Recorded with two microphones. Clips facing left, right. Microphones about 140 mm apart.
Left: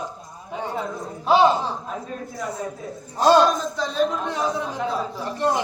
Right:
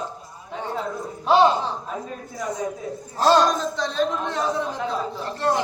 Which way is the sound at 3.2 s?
10° left (ahead or behind).